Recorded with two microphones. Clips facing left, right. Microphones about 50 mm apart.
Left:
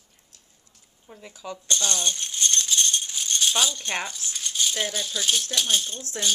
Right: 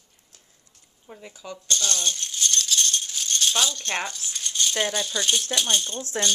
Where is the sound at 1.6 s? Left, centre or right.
Centre.